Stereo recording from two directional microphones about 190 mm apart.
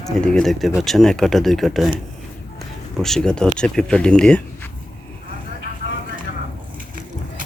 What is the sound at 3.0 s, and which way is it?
Speech, 5° left (ahead or behind).